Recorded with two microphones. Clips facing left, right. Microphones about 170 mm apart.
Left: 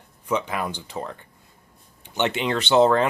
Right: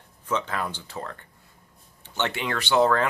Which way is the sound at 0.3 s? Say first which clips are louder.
Left 3 dB; 15° left (ahead or behind).